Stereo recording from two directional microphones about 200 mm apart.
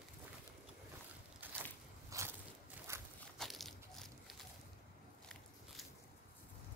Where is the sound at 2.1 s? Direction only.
15° right (ahead or behind).